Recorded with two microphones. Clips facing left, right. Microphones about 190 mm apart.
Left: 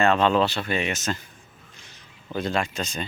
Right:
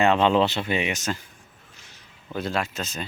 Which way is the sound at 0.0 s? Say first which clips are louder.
Right 1 dB; 15° right (ahead or behind).